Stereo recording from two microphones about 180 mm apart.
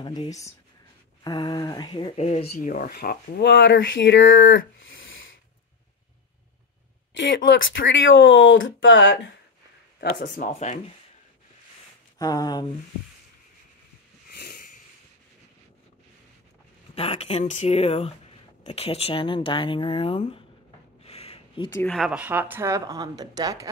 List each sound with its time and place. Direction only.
0.0 s speech: 25° left (ahead or behind)
2.1 s speech: 40° left (ahead or behind); by 5.3 s 90° left
7.2 s speech: 85° left
10.2 s speech: 45° left (ahead or behind)
12.2 s speech: 20° left (ahead or behind)
14.3 s a sound: 60° left (ahead or behind)
16.9 s speech: 35° left (ahead or behind)
21.0 s a sound: 35° left (ahead or behind)
21.7 s a woman's voice: 5° left (ahead or behind); by 23.7 s 20° right (ahead or behind)